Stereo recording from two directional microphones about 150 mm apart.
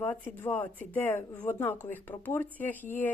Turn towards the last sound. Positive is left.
turn(degrees=10)  # may be behind; listen again after turning